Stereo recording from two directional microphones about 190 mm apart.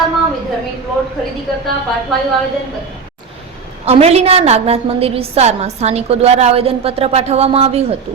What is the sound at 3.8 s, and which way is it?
A woman's voice, 35° right (ahead or behind).